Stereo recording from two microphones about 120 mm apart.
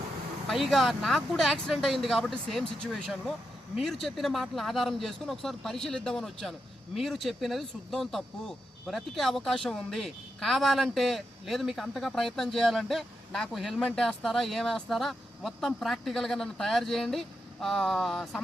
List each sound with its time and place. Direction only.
0.4 s speech: centre (ahead or behind)